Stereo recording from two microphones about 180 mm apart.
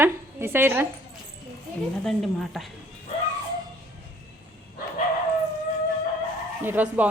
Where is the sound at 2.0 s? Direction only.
Centre (ahead or behind).